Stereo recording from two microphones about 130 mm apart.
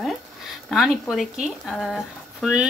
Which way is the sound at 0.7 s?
Centre (ahead or behind).